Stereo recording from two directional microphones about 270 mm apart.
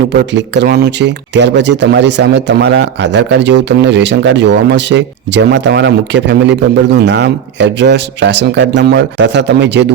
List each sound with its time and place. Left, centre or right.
0.1 s speech: right